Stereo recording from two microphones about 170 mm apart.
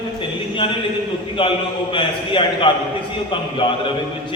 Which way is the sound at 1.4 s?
30° left (ahead or behind).